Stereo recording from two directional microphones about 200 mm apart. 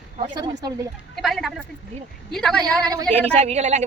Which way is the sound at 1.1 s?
Centre (ahead or behind).